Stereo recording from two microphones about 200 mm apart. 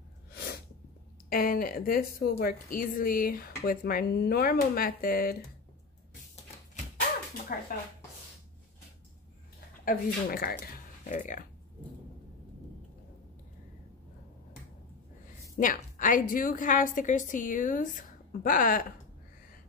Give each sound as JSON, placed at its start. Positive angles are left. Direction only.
{"t": 0.3, "sound": "sneeze", "side_deg": 50}
{"t": 1.3, "sound": "a woman's voice", "side_deg": 45}
{"t": 7.5, "sound": "a woman's voice", "side_deg": 45}
{"t": 9.8, "sound": "speech", "side_deg": 50}
{"t": 15.5, "sound": "a woman's voice", "side_deg": 45}